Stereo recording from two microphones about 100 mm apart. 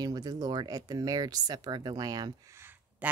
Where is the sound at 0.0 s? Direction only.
40° right (ahead or behind).